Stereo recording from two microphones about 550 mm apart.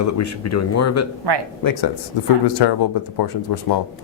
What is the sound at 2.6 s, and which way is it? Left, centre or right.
Speech, left.